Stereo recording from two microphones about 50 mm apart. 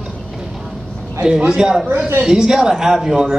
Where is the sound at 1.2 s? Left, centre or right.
Centre.